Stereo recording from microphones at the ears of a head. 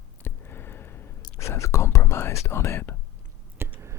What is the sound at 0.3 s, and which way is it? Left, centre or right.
Whispering, left.